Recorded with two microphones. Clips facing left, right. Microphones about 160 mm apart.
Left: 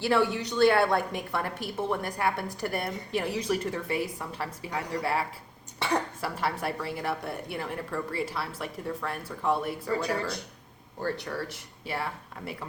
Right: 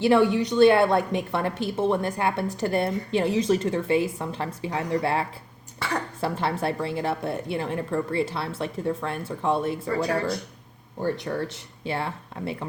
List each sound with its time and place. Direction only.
0.0 s a woman's voice: 20° right (ahead or behind)
6.2 s a woman's voice: 25° right (ahead or behind)